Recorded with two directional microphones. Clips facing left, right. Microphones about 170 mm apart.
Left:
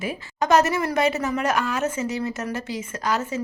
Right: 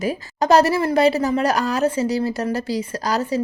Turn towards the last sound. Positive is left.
turn(degrees=-35)  # may be behind; listen again after turning